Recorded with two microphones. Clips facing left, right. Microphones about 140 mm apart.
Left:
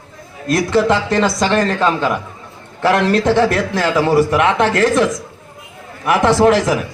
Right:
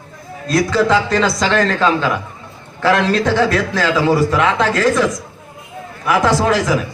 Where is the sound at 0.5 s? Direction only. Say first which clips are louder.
Even; 20° left (ahead or behind).